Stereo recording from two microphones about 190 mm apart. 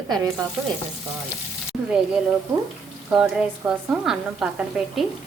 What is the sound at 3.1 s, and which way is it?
A woman's voice, 5° right (ahead or behind).